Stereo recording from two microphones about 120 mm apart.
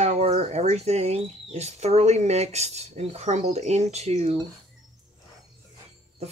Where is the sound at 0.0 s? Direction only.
70° right (ahead or behind).